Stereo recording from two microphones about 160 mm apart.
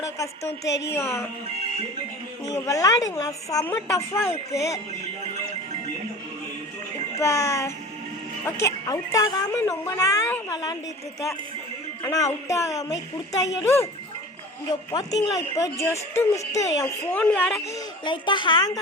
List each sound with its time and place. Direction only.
0.0 s a woman's voice: 20° left (ahead or behind)
2.6 s a woman's voice: 20° left (ahead or behind)
7.2 s speech: 20° left (ahead or behind)
12.0 s speech: 20° left (ahead or behind)
14.7 s speech: 25° left (ahead or behind)
17.1 s a woman's voice: 10° left (ahead or behind)
18.0 s speech: 30° left (ahead or behind)